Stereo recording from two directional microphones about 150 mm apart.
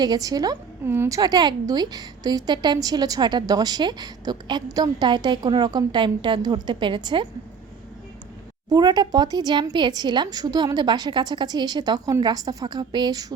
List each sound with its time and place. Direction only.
0.0 s a woman's voice: 25° right (ahead or behind)
8.7 s a woman's voice: 25° right (ahead or behind)